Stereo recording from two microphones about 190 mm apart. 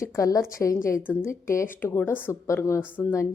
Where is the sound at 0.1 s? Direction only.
15° left (ahead or behind).